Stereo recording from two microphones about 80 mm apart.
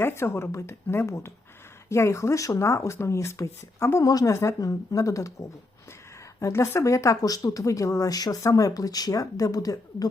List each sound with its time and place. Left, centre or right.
0.0 s speech: left
4.0 s speech: left